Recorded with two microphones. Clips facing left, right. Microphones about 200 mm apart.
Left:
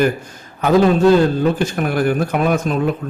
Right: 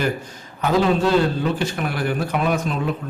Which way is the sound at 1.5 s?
45° left (ahead or behind).